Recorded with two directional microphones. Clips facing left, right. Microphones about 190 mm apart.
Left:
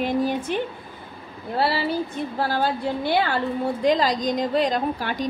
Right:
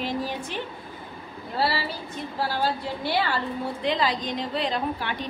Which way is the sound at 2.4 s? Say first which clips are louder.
Left 3 dB; 50° left (ahead or behind).